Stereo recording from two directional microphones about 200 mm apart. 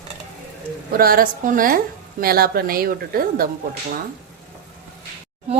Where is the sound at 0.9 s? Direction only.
50° right (ahead or behind).